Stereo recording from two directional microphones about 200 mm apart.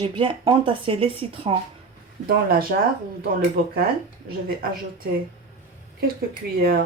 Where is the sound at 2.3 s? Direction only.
50° right (ahead or behind).